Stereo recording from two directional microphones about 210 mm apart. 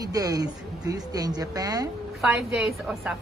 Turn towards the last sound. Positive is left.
turn(degrees=0)  # may be behind; listen again after turning